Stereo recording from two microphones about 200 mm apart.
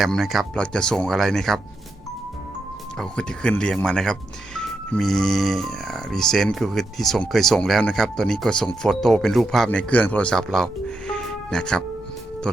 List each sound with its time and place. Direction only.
0.0 s speech: centre (ahead or behind)
3.0 s speech: 5° left (ahead or behind)